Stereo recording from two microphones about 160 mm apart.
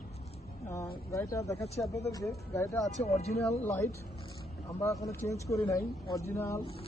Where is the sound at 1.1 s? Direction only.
20° left (ahead or behind).